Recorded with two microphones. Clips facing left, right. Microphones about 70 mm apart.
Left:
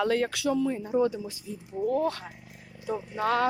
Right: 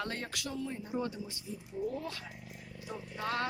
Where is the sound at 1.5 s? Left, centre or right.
Left.